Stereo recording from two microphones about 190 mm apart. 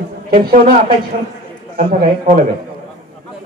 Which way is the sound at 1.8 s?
50° right (ahead or behind).